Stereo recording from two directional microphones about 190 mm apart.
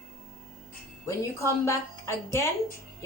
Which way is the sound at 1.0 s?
15° left (ahead or behind).